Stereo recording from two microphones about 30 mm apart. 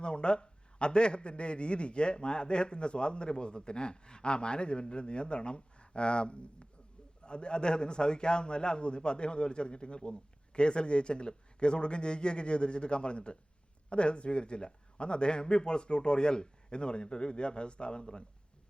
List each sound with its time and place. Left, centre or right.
0.0 s a man's voice: left